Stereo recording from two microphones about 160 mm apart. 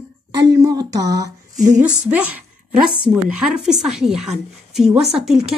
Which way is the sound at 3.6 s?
5° right (ahead or behind).